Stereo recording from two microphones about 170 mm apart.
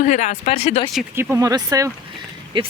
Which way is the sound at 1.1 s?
15° right (ahead or behind).